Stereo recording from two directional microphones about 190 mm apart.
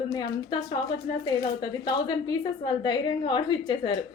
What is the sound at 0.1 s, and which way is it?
A woman's voice, 20° left (ahead or behind).